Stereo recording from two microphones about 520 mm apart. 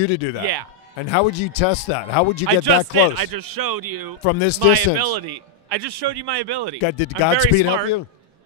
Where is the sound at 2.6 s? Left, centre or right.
Right.